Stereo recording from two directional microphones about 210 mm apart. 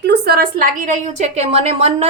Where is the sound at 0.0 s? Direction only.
50° right (ahead or behind).